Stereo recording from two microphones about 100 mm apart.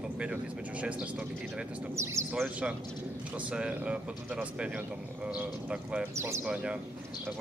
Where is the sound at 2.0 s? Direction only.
30° right (ahead or behind).